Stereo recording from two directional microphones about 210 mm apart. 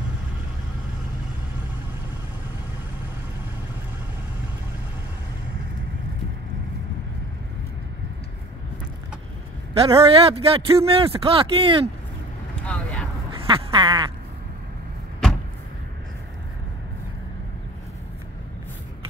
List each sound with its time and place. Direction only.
9.8 s speech: 25° right (ahead or behind)
12.6 s vehicle: 5° left (ahead or behind)
13.3 s quack: 25° right (ahead or behind)
15.2 s a sound: centre (ahead or behind)